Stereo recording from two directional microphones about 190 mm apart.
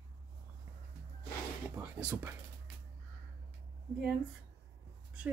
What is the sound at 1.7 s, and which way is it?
Speech, 15° right (ahead or behind).